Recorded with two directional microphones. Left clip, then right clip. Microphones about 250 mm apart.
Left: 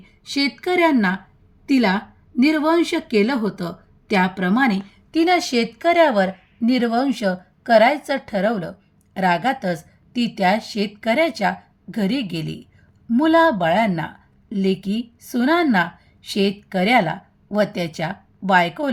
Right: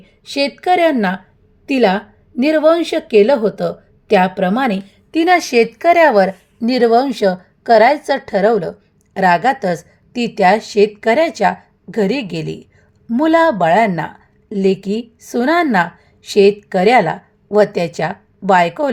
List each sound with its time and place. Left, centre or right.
0.0 s a woman's voice: centre